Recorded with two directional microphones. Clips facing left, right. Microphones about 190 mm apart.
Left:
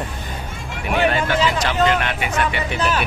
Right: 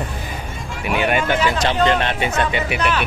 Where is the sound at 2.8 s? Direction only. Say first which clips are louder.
Left 2 dB; 40° left (ahead or behind).